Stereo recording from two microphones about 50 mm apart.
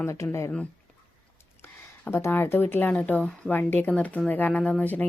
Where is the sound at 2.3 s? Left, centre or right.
Left.